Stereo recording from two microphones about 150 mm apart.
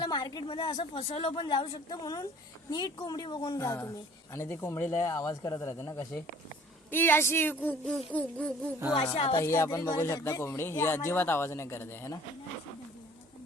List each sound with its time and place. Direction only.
0.0 s a woman's voice: 30° left (ahead or behind)
1.9 s speech: 25° left (ahead or behind); by 8.5 s 10° left (ahead or behind)
9.1 s a woman's voice: 40° left (ahead or behind)
9.4 s speech: 15° left (ahead or behind)